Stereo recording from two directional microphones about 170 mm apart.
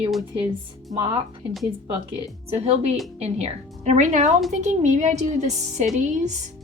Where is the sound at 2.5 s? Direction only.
40° right (ahead or behind).